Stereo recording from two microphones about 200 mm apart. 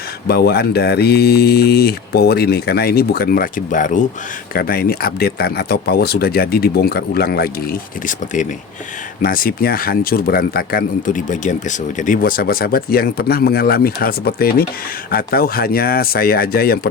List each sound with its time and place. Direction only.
0.3 s speech: 55° left (ahead or behind)